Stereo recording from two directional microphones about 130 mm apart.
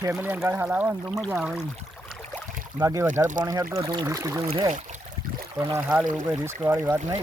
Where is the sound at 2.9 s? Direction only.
20° right (ahead or behind).